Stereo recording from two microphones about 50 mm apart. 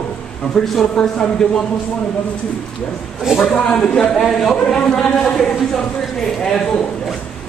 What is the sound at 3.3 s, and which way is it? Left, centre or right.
Speech, centre.